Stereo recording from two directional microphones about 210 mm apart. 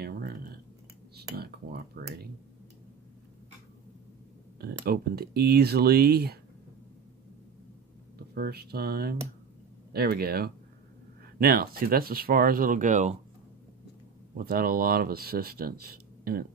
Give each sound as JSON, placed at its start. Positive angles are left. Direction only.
{"t": 0.0, "sound": "a sound", "side_deg": -45}
{"t": 4.6, "sound": "speech", "side_deg": -45}
{"t": 8.4, "sound": "speech", "side_deg": -50}
{"t": 14.3, "sound": "speech", "side_deg": -45}